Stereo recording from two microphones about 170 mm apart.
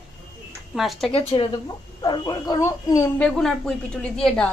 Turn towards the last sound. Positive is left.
turn(degrees=5)  # may be behind; listen again after turning